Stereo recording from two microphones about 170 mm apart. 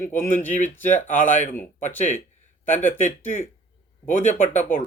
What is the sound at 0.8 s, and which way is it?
Speech, 45° left (ahead or behind).